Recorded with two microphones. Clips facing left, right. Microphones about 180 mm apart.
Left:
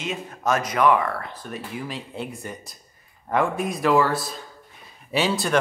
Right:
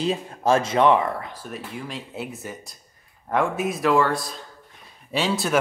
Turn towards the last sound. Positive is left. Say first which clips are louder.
# left 1 dB
turn(degrees=0)  # may be behind; listen again after turning